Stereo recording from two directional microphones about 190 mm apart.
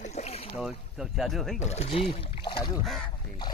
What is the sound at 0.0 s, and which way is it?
Boat, 35° left (ahead or behind).